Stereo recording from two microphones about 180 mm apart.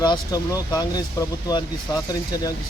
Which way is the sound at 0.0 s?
20° left (ahead or behind).